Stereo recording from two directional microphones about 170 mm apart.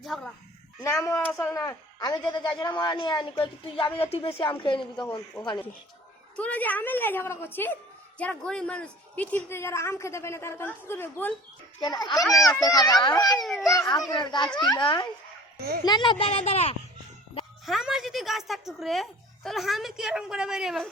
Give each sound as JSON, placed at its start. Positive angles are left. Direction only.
{"t": 0.0, "sound": "a sound", "side_deg": 0}
{"t": 0.8, "sound": "a woman's voice", "side_deg": 15}
{"t": 6.3, "sound": "a woman's voice", "side_deg": 10}
{"t": 11.8, "sound": "a woman's voice", "side_deg": 25}
{"t": 13.4, "sound": "a child's voice", "side_deg": 0}
{"t": 14.1, "sound": "a woman's voice", "side_deg": 25}
{"t": 15.5, "sound": "a child's voice", "side_deg": -70}
{"t": 15.8, "sound": "speech", "side_deg": 25}
{"t": 17.7, "sound": "a child's voice", "side_deg": 0}